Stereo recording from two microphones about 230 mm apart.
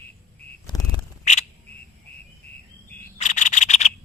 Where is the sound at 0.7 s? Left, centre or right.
Centre.